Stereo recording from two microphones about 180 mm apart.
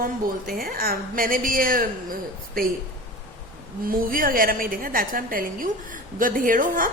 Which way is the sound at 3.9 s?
50° right (ahead or behind).